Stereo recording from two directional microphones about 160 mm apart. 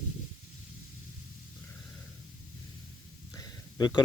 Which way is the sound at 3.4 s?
25° left (ahead or behind).